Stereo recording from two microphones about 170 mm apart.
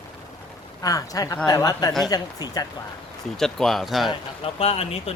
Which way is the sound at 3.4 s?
Centre (ahead or behind).